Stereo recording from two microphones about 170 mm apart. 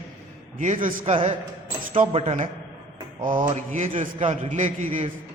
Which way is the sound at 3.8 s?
45° right (ahead or behind).